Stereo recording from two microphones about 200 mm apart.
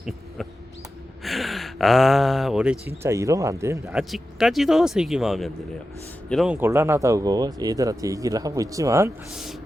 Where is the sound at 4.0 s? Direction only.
Centre (ahead or behind).